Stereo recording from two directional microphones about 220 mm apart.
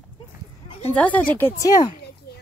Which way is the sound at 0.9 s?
5° left (ahead or behind).